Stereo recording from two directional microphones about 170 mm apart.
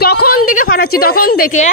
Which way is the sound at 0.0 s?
60° left (ahead or behind).